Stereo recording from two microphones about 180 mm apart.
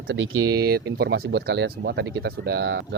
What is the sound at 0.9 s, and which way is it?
Speech, 60° right (ahead or behind).